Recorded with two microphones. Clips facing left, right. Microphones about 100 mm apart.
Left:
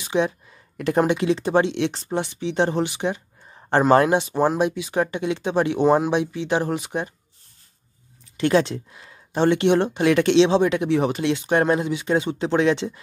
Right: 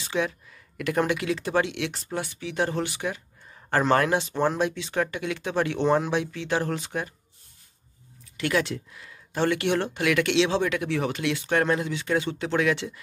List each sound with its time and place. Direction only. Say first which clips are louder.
0.0 s speech: left 5 dB; 20° left (ahead or behind)
8.4 s speech: left 6 dB; 30° left (ahead or behind)